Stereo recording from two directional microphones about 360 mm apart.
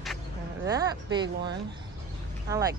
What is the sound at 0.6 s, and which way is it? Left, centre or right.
Speech, centre.